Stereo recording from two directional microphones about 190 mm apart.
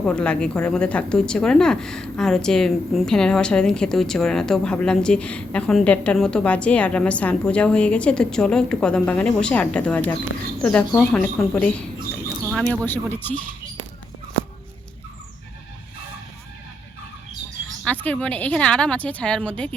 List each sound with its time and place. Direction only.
0.0 s speech: 5° left (ahead or behind)
17.8 s speech: 5° left (ahead or behind)